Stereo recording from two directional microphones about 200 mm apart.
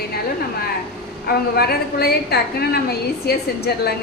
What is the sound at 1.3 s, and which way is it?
A woman's voice, 50° left (ahead or behind).